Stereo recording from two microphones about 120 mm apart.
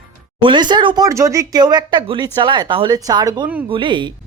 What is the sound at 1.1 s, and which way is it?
Speech, 25° right (ahead or behind).